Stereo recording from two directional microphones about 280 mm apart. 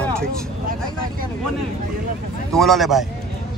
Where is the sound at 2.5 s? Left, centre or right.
Centre.